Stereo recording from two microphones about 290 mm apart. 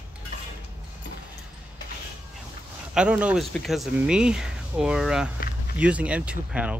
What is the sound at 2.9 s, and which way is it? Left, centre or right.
Speech, centre.